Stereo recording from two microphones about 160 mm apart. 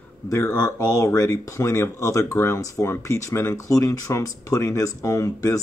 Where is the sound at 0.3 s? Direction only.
20° left (ahead or behind).